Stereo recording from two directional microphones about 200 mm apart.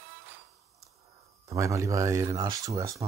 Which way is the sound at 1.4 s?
15° right (ahead or behind).